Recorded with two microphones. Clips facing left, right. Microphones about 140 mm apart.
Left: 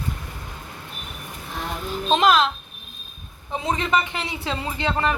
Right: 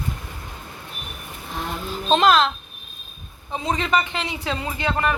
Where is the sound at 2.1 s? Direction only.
10° left (ahead or behind).